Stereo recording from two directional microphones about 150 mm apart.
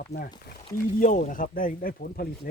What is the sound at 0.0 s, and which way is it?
Speech, 80° left.